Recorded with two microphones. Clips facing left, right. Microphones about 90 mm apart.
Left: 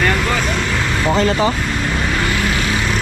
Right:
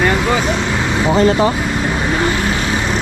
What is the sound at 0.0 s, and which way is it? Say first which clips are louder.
Vehicle: right 3 dB; 10° right (ahead or behind).